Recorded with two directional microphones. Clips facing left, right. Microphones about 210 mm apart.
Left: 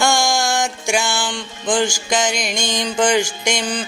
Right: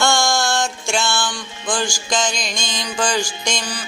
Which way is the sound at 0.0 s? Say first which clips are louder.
Left 1 dB; 15° left (ahead or behind).